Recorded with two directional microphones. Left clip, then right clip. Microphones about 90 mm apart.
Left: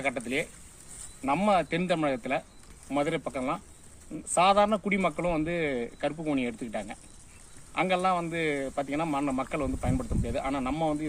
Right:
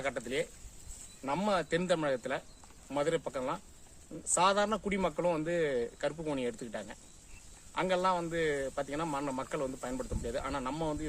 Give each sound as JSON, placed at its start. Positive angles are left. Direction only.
{"t": 0.0, "sound": "speech", "side_deg": -55}
{"t": 6.5, "sound": "speech", "side_deg": -50}